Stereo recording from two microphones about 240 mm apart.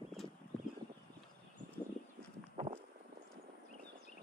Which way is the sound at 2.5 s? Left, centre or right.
Right.